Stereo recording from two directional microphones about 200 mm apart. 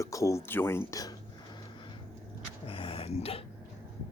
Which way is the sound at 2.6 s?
25° left (ahead or behind).